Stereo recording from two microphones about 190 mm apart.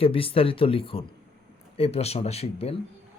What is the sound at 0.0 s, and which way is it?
Speech, 30° left (ahead or behind).